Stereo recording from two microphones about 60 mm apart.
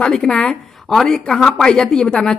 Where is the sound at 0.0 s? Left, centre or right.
Centre.